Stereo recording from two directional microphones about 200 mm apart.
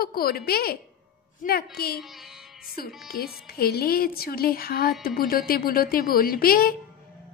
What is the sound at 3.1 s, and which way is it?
A woman's voice, 50° left (ahead or behind).